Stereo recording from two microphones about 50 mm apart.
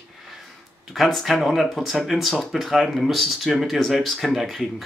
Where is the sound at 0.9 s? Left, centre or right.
Centre.